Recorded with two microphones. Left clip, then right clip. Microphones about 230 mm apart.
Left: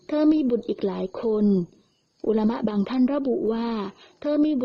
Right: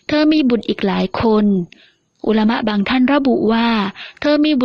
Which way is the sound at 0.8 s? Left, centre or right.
Right.